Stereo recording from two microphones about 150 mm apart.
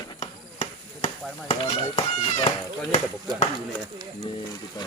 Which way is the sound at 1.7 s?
35° left (ahead or behind).